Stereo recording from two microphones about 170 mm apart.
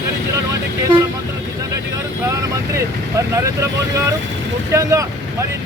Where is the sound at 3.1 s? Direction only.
20° right (ahead or behind).